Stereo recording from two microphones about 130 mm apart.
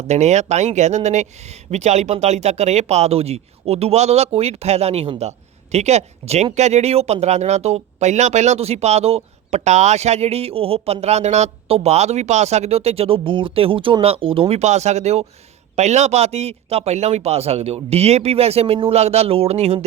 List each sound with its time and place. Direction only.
0.1 s a man's voice: 60° right (ahead or behind)